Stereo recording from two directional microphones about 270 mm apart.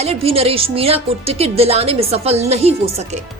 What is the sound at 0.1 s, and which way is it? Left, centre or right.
A woman's voice, right.